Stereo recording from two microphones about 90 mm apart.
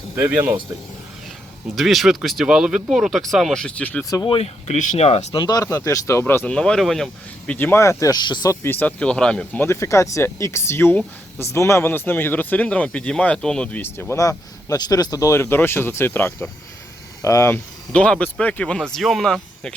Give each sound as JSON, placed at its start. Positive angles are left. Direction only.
{"t": 0.2, "sound": "speech", "side_deg": -20}
{"t": 1.7, "sound": "speech", "side_deg": 0}
{"t": 4.1, "sound": "speech", "side_deg": 40}
{"t": 5.3, "sound": "speech", "side_deg": 50}
{"t": 5.6, "sound": "speech", "side_deg": 40}
{"t": 6.4, "sound": "speech", "side_deg": 10}
{"t": 7.4, "sound": "speech", "side_deg": 20}
{"t": 7.8, "sound": "speech", "side_deg": 35}
{"t": 8.2, "sound": "speech", "side_deg": 55}
{"t": 8.4, "sound": "speech", "side_deg": 25}
{"t": 9.6, "sound": "speech", "side_deg": 30}
{"t": 13.8, "sound": "speech", "side_deg": 25}
{"t": 17.9, "sound": "speech", "side_deg": 15}